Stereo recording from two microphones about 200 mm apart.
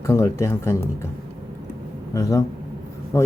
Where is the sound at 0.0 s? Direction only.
15° left (ahead or behind).